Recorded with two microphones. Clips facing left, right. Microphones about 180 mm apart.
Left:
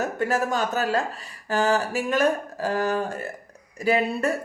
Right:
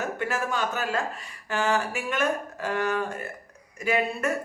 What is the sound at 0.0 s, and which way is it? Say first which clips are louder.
Speech: left 5 dB; 40° left (ahead or behind).